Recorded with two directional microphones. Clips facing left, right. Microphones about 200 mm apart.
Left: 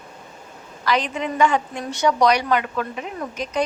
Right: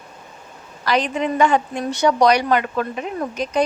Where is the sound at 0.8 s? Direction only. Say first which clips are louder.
Right 3 dB; 35° right (ahead or behind).